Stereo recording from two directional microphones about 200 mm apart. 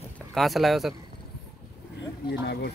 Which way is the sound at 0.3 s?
Centre (ahead or behind).